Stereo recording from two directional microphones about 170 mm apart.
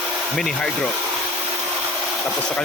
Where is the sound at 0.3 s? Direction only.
5° left (ahead or behind).